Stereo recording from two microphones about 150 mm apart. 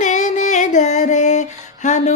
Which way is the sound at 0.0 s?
55° left (ahead or behind).